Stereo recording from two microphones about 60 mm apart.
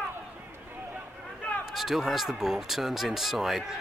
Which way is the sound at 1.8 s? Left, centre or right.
Centre.